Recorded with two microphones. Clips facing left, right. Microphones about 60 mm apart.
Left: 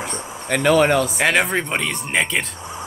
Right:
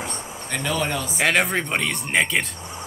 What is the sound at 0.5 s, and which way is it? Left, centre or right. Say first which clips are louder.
Speech: left 10 dB; left.